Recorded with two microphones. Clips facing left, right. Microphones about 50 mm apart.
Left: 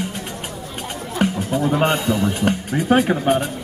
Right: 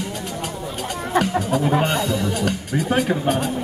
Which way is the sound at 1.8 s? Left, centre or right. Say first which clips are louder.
Left 3 dB; left.